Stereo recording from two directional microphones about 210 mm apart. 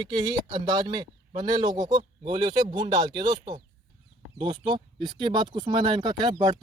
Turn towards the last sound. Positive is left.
turn(degrees=-20)  # may be behind; listen again after turning